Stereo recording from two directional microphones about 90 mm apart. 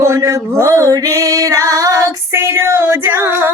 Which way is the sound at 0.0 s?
30° right (ahead or behind).